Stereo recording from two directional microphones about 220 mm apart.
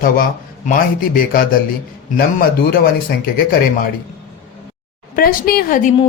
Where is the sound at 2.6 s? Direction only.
45° left (ahead or behind).